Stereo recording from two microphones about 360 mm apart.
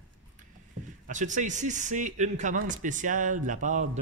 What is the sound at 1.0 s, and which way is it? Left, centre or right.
Speech, right.